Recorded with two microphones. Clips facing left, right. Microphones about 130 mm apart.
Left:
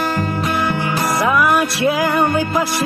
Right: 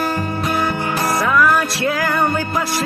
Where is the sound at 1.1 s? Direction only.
15° left (ahead or behind).